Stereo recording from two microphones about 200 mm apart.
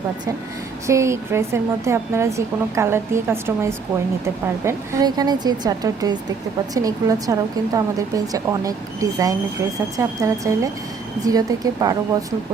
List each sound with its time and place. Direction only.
0.9 s a woman's voice: 15° right (ahead or behind)